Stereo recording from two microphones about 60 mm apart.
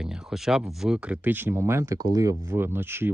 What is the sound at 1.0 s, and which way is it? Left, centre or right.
Speech, centre.